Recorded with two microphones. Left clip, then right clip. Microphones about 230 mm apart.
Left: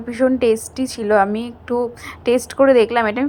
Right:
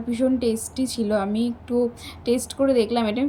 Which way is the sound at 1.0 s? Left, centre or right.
Left.